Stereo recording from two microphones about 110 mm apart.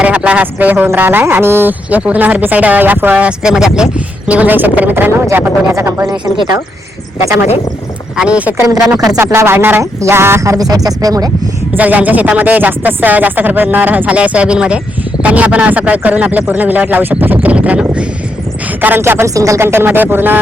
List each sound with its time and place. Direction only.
0.0 s speech: 10° right (ahead or behind)
8.1 s speech: 10° right (ahead or behind)
9.0 s speech: 25° right (ahead or behind)
11.7 s speech: 15° right (ahead or behind)